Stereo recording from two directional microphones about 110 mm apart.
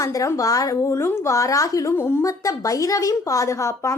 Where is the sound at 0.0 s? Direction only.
30° left (ahead or behind).